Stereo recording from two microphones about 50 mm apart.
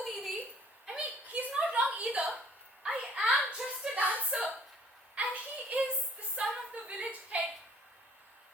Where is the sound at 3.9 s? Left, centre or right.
Right.